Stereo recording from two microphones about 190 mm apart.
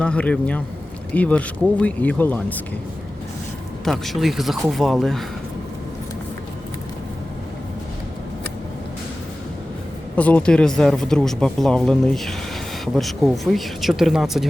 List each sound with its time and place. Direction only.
0.0 s speech: 5° left (ahead or behind)
3.8 s speech: centre (ahead or behind)
10.2 s speech: 5° left (ahead or behind)